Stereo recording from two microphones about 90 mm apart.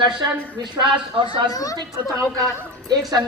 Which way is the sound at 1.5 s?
40° left (ahead or behind).